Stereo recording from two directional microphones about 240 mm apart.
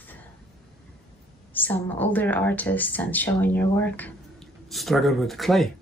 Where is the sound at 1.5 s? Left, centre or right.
Centre.